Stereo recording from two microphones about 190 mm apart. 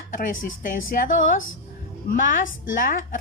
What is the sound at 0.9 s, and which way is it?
Speech, 55° left (ahead or behind).